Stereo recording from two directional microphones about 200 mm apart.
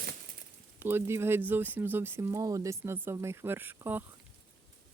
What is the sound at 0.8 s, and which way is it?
Speech, 10° right (ahead or behind).